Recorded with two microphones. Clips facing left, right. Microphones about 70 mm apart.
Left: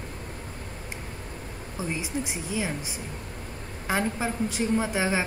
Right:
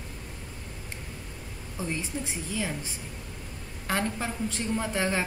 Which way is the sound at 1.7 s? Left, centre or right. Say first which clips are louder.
Left 2 dB; centre.